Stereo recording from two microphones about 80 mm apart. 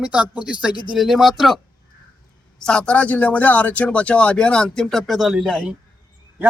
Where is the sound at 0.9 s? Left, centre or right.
Centre.